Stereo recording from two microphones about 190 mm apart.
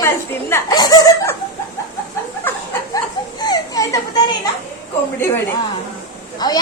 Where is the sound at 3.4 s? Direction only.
20° left (ahead or behind).